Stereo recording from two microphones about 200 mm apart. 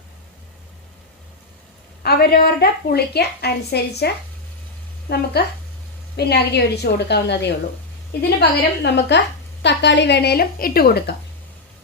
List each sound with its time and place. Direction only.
2.0 s a woman's voice: 50° left (ahead or behind)